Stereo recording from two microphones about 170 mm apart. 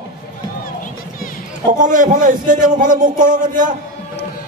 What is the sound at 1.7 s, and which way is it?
A man's voice, 50° right (ahead or behind).